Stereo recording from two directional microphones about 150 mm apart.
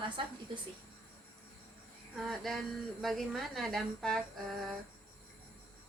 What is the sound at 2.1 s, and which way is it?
A woman's voice, centre (ahead or behind).